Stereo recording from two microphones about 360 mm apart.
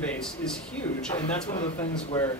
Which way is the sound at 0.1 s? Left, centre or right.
Centre.